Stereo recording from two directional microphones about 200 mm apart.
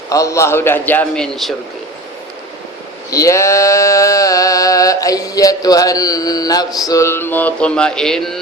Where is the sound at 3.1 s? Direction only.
15° left (ahead or behind).